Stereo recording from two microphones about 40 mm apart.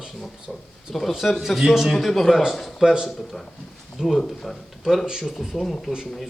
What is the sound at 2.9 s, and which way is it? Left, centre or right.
Speech, centre.